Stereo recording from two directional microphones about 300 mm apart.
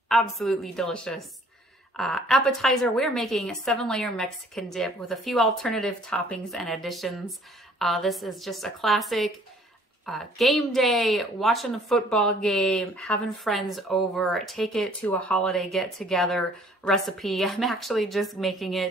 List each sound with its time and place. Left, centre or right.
0.1 s speech: centre